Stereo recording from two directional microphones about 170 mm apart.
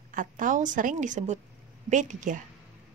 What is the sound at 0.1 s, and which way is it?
A woman's voice, 50° right (ahead or behind).